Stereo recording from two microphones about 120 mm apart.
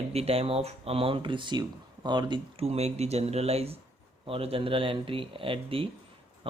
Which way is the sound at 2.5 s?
60° right (ahead or behind).